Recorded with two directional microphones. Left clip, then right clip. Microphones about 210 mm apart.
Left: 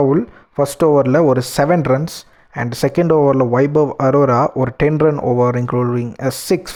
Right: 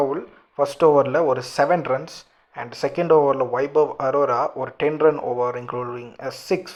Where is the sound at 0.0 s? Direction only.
45° left (ahead or behind).